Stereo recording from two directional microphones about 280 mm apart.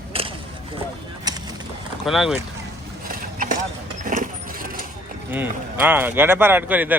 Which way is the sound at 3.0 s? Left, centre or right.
Right.